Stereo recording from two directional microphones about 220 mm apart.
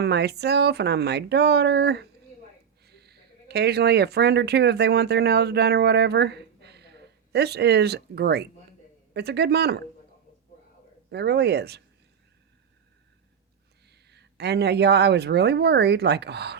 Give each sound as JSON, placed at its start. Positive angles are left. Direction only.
{"t": 0.0, "sound": "speech", "side_deg": -50}
{"t": 11.1, "sound": "speech", "side_deg": -50}
{"t": 13.9, "sound": "speech", "side_deg": -50}